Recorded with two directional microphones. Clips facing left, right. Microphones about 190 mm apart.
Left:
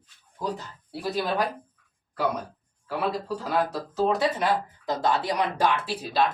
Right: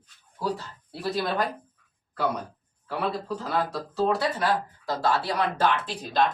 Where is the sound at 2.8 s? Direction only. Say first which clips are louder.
Left 1 dB; 10° left (ahead or behind).